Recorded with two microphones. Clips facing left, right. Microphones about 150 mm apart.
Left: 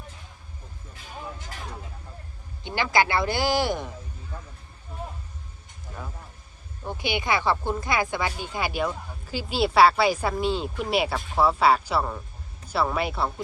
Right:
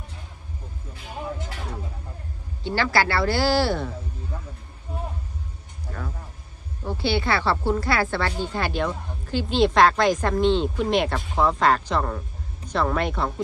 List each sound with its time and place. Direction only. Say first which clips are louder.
2.6 s speech: right 1 dB; 15° left (ahead or behind)
6.8 s speech: right 3 dB; 15° left (ahead or behind)